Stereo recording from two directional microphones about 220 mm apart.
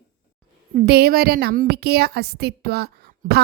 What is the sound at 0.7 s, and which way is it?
A woman's voice, 45° right (ahead or behind).